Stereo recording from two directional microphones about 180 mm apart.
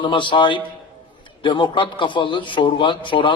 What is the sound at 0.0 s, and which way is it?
Speech, 25° left (ahead or behind).